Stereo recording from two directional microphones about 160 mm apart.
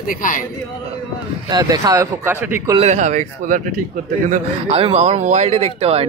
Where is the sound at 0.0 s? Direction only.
60° left (ahead or behind).